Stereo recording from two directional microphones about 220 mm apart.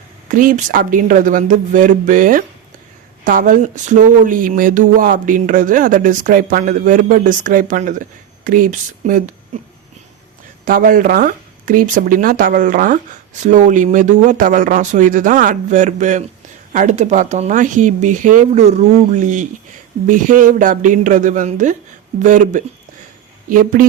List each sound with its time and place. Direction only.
0.3 s speech: 40° right (ahead or behind)
10.7 s speech: 40° right (ahead or behind)